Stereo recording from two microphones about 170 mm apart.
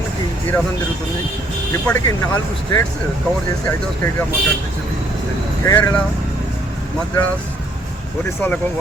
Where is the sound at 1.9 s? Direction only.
15° left (ahead or behind).